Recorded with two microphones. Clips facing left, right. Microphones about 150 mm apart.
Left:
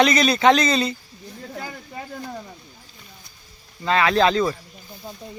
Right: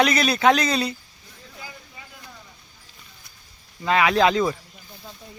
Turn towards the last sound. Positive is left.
turn(degrees=-10)  # may be behind; listen again after turning